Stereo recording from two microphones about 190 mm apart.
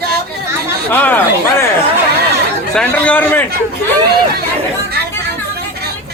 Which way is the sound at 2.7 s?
5° left (ahead or behind).